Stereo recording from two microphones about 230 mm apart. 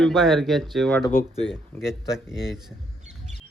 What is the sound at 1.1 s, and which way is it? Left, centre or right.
Speech, left.